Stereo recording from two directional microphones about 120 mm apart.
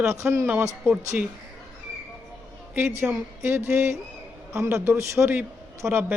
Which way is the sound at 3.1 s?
20° right (ahead or behind).